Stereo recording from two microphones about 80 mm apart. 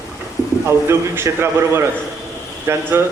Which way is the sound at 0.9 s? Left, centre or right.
Right.